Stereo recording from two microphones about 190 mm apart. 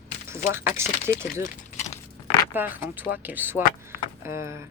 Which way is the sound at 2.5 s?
10° right (ahead or behind).